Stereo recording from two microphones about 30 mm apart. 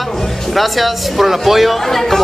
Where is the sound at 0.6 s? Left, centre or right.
Centre.